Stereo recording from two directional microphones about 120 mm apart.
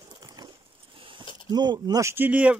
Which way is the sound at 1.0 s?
45° right (ahead or behind).